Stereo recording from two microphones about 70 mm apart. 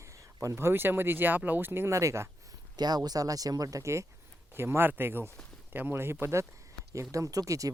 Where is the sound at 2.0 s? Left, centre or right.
Right.